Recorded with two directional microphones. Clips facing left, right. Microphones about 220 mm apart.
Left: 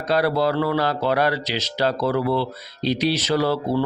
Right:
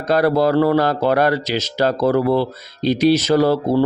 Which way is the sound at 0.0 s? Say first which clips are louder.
Right 4 dB; 45° right (ahead or behind).